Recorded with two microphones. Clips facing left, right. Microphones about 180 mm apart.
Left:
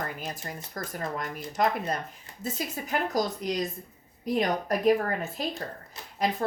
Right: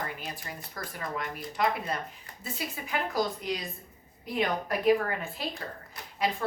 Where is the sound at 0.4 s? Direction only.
45° left (ahead or behind).